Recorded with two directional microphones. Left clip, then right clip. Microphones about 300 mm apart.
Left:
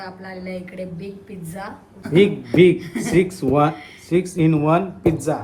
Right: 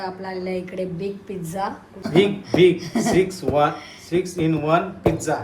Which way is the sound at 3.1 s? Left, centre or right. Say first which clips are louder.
Left 2 dB; left.